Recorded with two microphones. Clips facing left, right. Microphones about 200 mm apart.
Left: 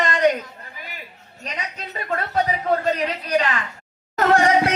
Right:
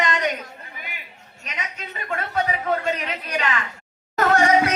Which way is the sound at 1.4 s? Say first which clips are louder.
Left 3 dB; 35° left (ahead or behind).